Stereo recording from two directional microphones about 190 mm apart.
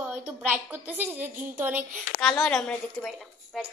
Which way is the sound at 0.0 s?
5° right (ahead or behind).